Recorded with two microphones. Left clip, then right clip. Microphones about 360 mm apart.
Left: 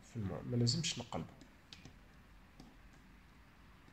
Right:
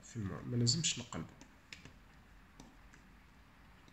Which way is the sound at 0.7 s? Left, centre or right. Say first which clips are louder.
Right 3 dB; left.